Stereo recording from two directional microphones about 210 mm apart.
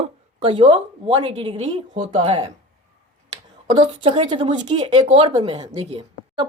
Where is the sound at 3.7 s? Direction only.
25° right (ahead or behind).